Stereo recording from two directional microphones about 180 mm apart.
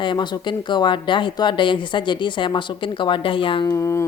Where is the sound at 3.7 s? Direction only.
15° left (ahead or behind).